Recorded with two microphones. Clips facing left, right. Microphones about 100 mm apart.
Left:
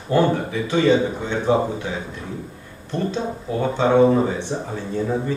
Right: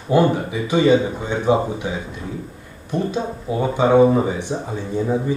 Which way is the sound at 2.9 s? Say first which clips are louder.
Right 2 dB; 15° right (ahead or behind).